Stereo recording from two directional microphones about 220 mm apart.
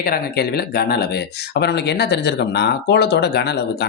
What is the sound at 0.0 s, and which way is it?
Speech, 45° left (ahead or behind).